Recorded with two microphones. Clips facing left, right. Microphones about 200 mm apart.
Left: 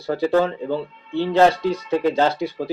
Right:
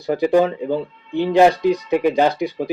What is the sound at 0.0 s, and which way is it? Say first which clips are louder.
Speech: right 3 dB; 15° right (ahead or behind).